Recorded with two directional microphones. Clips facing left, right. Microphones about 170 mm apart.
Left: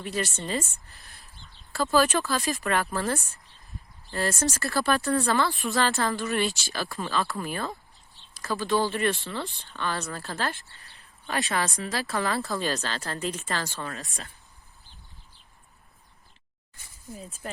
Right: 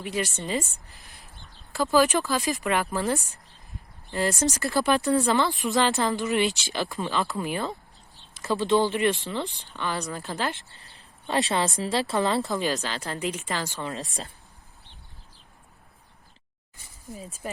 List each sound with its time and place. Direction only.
0.0 s speech: 15° right (ahead or behind)
17.2 s speech: 5° right (ahead or behind)